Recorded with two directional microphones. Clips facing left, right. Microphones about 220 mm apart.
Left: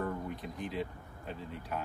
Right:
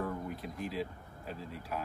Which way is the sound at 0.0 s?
Centre (ahead or behind).